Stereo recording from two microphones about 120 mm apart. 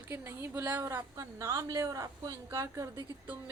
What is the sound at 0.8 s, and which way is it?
A woman's voice, 25° right (ahead or behind).